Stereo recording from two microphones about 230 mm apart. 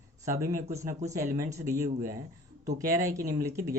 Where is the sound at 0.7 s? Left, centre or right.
Centre.